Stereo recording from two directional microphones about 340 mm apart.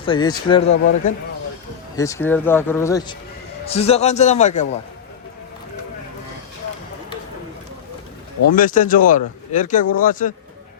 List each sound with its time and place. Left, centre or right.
0.0 s speech: centre
2.0 s speech: centre
8.5 s speech: left